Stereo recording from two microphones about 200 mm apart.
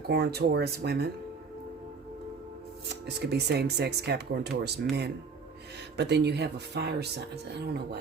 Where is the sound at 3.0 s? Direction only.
55° right (ahead or behind).